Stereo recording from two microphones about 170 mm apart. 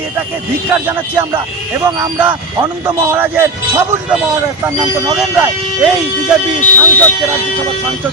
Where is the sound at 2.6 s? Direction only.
25° right (ahead or behind).